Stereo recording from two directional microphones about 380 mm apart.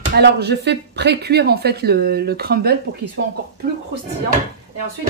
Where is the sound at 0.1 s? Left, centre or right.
Right.